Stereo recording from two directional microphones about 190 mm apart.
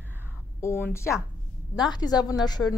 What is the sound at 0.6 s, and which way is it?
A woman's voice, 10° left (ahead or behind).